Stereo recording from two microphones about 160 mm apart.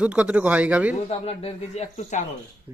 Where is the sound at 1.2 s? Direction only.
40° left (ahead or behind).